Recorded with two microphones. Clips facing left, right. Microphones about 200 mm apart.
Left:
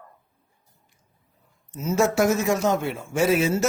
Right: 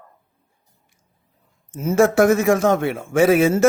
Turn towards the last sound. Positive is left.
turn(degrees=-55)  # may be behind; listen again after turning